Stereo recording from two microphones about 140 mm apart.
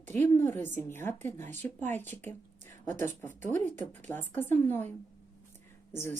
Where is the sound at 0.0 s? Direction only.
15° left (ahead or behind).